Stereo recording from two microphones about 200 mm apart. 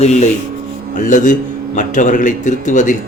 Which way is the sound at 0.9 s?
40° left (ahead or behind).